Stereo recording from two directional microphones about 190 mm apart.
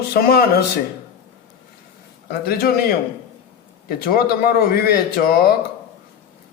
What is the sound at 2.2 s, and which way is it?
Speech, 55° left (ahead or behind).